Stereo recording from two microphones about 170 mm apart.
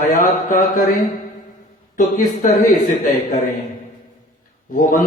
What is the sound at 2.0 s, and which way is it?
Speech, 50° left (ahead or behind).